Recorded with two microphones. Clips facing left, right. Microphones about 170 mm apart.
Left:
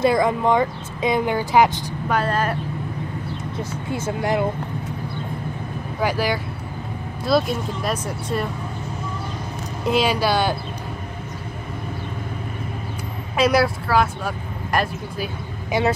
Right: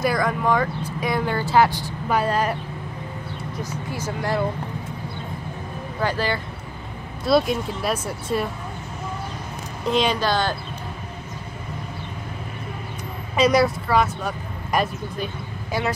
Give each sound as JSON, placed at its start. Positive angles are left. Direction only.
{"t": 0.0, "sound": "speech", "side_deg": 25}
{"t": 2.0, "sound": "speech", "side_deg": -10}
{"t": 3.5, "sound": "speech", "side_deg": 25}
{"t": 5.9, "sound": "speech", "side_deg": 10}
{"t": 7.2, "sound": "speech", "side_deg": 0}
{"t": 9.8, "sound": "speech", "side_deg": 5}
{"t": 13.4, "sound": "speech", "side_deg": 5}
{"t": 15.7, "sound": "speech", "side_deg": 20}